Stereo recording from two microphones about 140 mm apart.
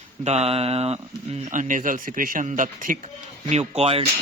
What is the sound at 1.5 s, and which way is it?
A man's voice, 65° right (ahead or behind).